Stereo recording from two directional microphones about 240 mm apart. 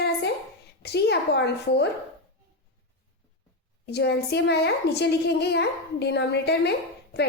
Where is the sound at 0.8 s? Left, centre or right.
Left.